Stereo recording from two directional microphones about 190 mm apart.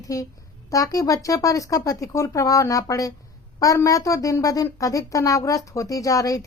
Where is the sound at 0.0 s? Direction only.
15° left (ahead or behind).